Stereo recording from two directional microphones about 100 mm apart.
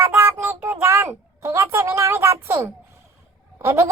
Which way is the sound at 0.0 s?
25° right (ahead or behind).